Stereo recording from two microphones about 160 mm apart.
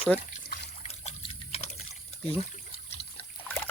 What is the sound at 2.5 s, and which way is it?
Water, 45° left (ahead or behind).